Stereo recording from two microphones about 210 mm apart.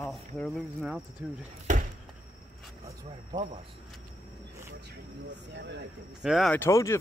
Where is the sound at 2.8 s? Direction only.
25° right (ahead or behind).